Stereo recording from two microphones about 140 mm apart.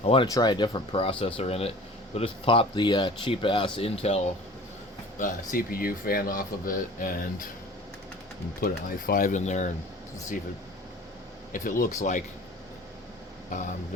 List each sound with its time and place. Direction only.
0.0 s speech: 45° left (ahead or behind)
0.3 s speech: 30° left (ahead or behind)
5.1 s speech: 70° left (ahead or behind)
8.6 s speech: 85° left; by 9.7 s 60° left (ahead or behind)
11.5 s speech: 70° left (ahead or behind)